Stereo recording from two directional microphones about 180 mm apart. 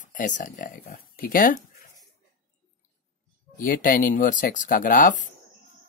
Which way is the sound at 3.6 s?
50° left (ahead or behind).